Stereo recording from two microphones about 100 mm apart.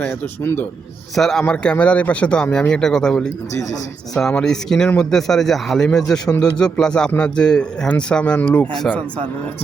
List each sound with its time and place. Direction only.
0.0 s a man's voice: 20° left (ahead or behind)
1.1 s a man's voice: 5° left (ahead or behind)